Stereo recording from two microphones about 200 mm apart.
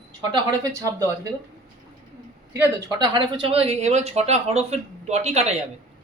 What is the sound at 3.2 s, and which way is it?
Speech, 25° right (ahead or behind).